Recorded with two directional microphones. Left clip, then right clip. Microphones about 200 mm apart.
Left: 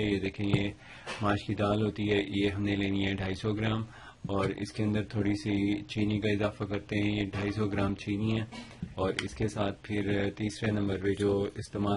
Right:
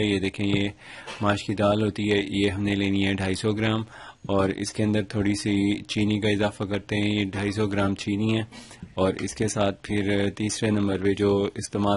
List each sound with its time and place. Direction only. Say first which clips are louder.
0.1 s speech: right 6 dB; 45° right (ahead or behind)